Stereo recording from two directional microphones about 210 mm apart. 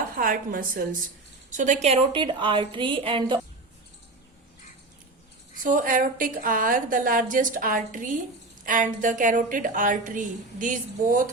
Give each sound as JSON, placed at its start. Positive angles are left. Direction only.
{"t": 0.2, "sound": "a woman's voice", "side_deg": -40}
{"t": 5.6, "sound": "a woman's voice", "side_deg": -40}